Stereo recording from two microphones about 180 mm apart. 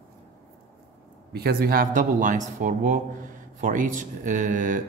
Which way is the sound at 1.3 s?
60° right (ahead or behind).